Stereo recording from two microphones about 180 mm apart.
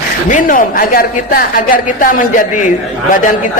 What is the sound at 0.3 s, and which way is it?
A woman's voice, 50° left (ahead or behind).